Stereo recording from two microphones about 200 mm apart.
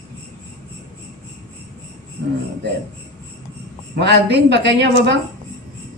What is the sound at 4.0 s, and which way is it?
A woman's voice, 60° right (ahead or behind).